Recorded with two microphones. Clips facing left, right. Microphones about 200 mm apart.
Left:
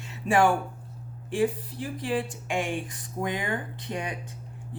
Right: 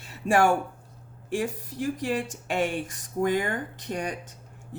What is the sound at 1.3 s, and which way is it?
Speech, 45° right (ahead or behind).